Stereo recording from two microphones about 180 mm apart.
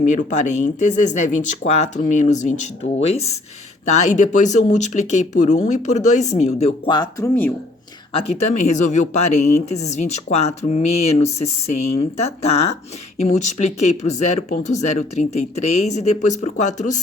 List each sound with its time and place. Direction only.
0.0 s speech: 45° left (ahead or behind); by 7.3 s 20° left (ahead or behind)
8.1 s speech: 35° left (ahead or behind)